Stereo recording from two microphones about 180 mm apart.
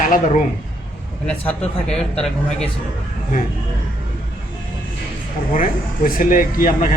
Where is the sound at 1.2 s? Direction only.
10° left (ahead or behind).